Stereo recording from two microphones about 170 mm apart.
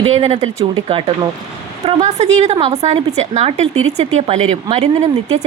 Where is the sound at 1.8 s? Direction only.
35° right (ahead or behind).